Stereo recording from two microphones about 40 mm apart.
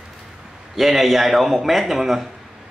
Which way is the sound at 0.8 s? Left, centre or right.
Centre.